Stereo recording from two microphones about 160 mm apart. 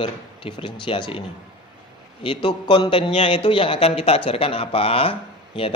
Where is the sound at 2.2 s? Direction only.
30° left (ahead or behind).